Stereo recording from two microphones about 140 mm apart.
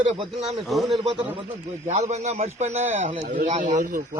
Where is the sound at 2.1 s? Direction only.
50° right (ahead or behind); by 4.0 s 70° right (ahead or behind).